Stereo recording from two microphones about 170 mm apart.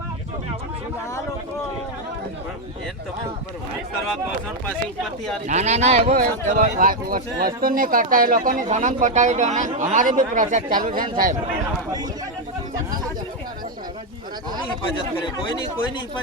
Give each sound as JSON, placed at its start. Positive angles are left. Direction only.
{"t": 5.5, "sound": "speech", "side_deg": -40}
{"t": 6.2, "sound": "speech", "side_deg": -55}